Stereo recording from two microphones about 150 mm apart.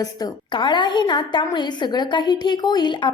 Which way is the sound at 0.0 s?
25° left (ahead or behind).